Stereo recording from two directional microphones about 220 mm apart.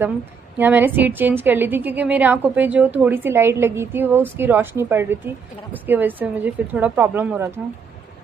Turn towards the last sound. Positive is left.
turn(degrees=-10)  # may be behind; listen again after turning